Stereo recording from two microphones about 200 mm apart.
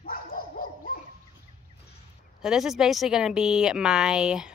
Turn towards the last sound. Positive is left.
turn(degrees=-5)  # may be behind; listen again after turning